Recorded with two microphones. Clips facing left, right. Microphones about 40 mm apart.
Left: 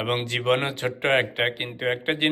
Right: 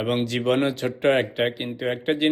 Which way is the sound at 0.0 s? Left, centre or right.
Left.